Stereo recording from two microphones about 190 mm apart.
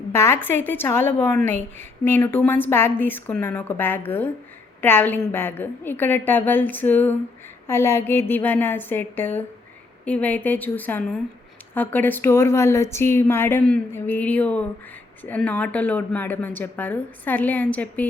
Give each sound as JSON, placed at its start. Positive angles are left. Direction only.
{"t": 0.1, "sound": "a woman's voice", "side_deg": 15}